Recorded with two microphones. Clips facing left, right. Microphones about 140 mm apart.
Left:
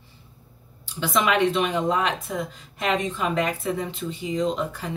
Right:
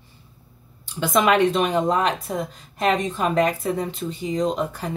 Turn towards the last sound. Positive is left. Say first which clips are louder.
# right 2 dB
turn(degrees=-40)  # may be behind; listen again after turning